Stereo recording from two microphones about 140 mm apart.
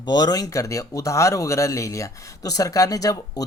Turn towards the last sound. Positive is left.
turn(degrees=25)  # may be behind; listen again after turning